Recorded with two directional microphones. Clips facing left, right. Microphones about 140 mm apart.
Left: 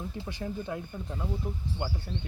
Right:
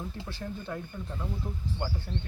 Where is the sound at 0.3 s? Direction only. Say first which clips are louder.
Left 5 dB; 15° left (ahead or behind).